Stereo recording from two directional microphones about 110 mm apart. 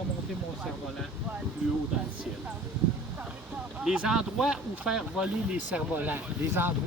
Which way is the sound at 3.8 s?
10° right (ahead or behind).